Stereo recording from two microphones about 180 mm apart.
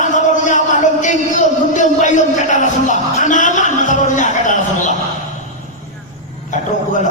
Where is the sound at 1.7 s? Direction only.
45° left (ahead or behind).